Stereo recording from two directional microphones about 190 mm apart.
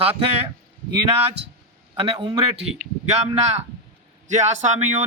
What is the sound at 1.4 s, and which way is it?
Speech, 65° right (ahead or behind).